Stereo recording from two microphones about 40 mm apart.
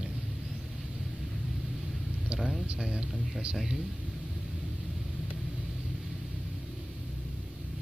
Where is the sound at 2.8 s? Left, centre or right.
Right.